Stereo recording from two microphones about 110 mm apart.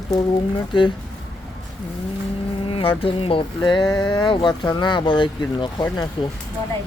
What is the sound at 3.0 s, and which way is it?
Speech, 55° left (ahead or behind).